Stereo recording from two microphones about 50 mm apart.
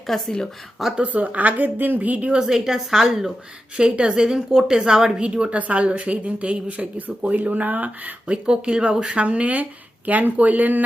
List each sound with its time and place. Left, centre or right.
0.1 s speech: centre
0.9 s a woman's voice: right
2.4 s a woman's voice: centre; by 8.1 s right
8.3 s a woman's voice: centre; by 10.8 s right